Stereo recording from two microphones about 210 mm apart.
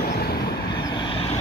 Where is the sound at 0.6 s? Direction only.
20° left (ahead or behind).